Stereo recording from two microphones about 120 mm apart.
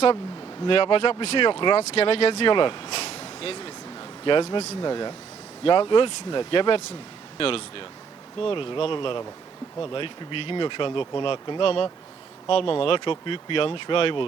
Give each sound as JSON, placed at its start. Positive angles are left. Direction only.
{"t": 0.6, "sound": "speech", "side_deg": 50}
{"t": 1.8, "sound": "speech", "side_deg": 60}
{"t": 2.5, "sound": "a sound", "side_deg": 45}
{"t": 4.8, "sound": "speech", "side_deg": 35}